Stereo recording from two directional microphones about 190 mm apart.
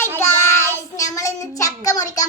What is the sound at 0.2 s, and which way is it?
Child singing, 10° left (ahead or behind).